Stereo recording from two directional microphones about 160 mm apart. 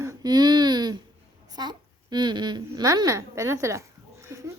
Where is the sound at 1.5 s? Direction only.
25° right (ahead or behind).